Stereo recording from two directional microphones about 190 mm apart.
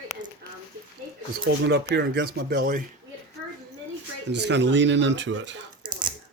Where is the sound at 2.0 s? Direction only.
60° right (ahead or behind).